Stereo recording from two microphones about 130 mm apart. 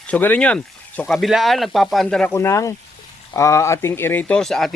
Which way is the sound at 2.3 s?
20° left (ahead or behind).